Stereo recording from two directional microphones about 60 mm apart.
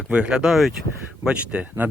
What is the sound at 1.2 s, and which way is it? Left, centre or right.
Speech, centre.